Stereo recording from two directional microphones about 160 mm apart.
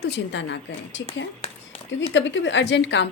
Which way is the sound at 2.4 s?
90° left.